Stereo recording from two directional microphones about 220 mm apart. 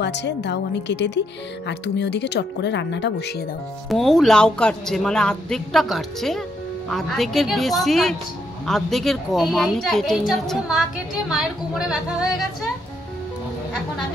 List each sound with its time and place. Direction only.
0.0 s speech: 50° left (ahead or behind)
3.9 s speech: centre (ahead or behind)
11.9 s speech: centre (ahead or behind)